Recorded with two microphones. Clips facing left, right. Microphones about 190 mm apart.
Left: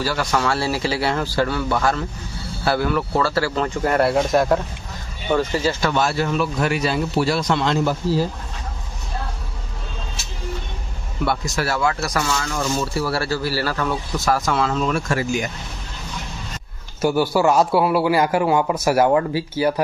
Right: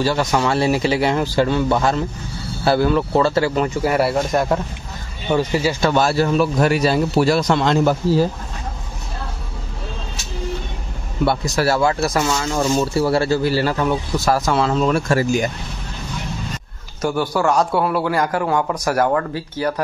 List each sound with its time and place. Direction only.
0.0 s speech: 20° right (ahead or behind); by 4.6 s centre (ahead or behind)
5.3 s speech: 10° right (ahead or behind)
5.8 s a man's voice: 35° right (ahead or behind); by 7.9 s 50° right (ahead or behind)
11.2 s speech: 35° right (ahead or behind)
17.0 s a man's voice: 5° left (ahead or behind)